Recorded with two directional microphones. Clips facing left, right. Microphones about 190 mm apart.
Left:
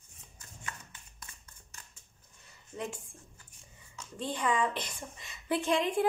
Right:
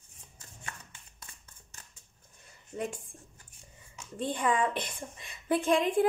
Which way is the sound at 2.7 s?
40° right (ahead or behind).